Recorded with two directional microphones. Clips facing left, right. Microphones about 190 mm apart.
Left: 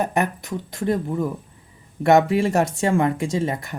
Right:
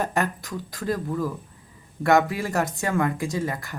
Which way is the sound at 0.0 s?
20° left (ahead or behind).